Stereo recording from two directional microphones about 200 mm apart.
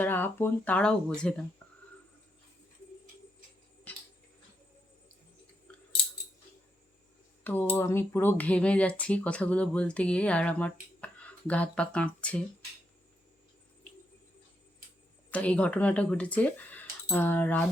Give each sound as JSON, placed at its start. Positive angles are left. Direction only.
{"t": 0.0, "sound": "speech", "side_deg": 10}
{"t": 3.9, "sound": "a sound", "side_deg": 10}
{"t": 7.4, "sound": "speech", "side_deg": 10}
{"t": 15.3, "sound": "speech", "side_deg": 5}